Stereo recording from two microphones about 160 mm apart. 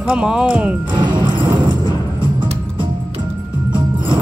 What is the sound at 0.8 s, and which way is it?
Music, 30° right (ahead or behind).